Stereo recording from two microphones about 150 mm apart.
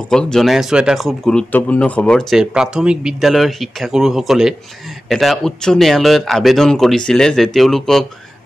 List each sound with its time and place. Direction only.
0.1 s speech: 5° left (ahead or behind)